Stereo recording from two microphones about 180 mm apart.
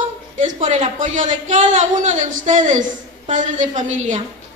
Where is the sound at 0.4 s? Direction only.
45° right (ahead or behind).